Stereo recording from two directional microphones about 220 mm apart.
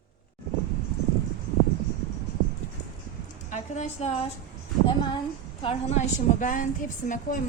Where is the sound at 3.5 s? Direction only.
30° left (ahead or behind).